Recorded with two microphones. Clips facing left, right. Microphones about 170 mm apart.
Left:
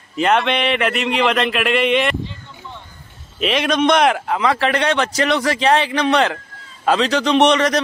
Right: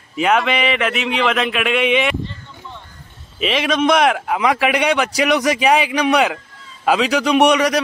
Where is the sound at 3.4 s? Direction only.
Centre (ahead or behind).